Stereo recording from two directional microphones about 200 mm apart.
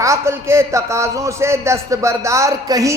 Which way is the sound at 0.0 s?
15° right (ahead or behind).